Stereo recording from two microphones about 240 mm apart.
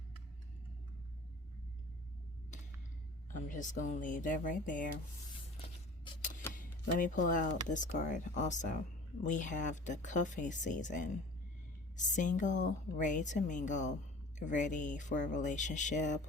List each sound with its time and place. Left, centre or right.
3.2 s a woman's voice: left
6.5 s a sound: left
7.7 s a woman's voice: left